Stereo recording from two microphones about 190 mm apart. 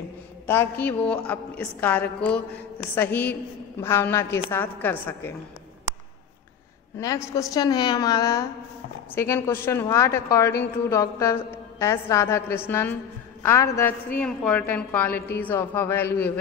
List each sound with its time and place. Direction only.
0.5 s a woman's voice: 10° left (ahead or behind)
7.0 s a woman's voice: 15° left (ahead or behind)